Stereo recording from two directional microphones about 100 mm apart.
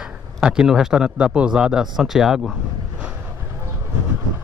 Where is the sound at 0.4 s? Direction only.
5° right (ahead or behind).